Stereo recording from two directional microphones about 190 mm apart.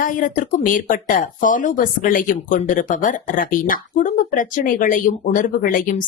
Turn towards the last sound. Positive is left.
turn(degrees=45)  # may be behind; listen again after turning